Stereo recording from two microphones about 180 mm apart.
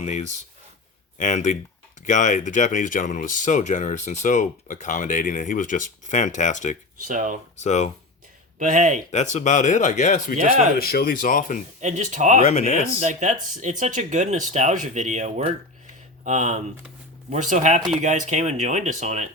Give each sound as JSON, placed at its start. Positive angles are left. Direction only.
{"t": 0.0, "sound": "speech", "side_deg": 40}
{"t": 7.1, "sound": "speech", "side_deg": -45}
{"t": 7.5, "sound": "speech", "side_deg": 40}
{"t": 8.5, "sound": "a man's voice", "side_deg": -45}
{"t": 9.1, "sound": "speech", "side_deg": 40}
{"t": 10.8, "sound": "speech", "side_deg": 55}
{"t": 11.8, "sound": "speech", "side_deg": -45}
{"t": 12.4, "sound": "speech", "side_deg": 40}
{"t": 13.0, "sound": "speech", "side_deg": -40}